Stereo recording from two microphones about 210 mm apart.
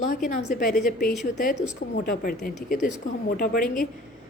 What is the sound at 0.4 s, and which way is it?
Mantra, 40° left (ahead or behind).